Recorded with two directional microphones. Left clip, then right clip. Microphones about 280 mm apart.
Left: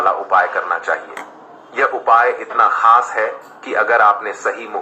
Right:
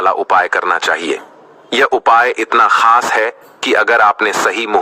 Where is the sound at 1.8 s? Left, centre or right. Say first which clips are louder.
Right 2 dB; right.